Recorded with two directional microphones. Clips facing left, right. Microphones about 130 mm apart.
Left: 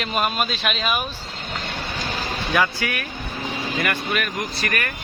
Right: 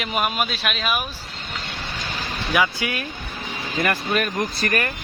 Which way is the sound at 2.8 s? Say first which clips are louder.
Even; 20° right (ahead or behind).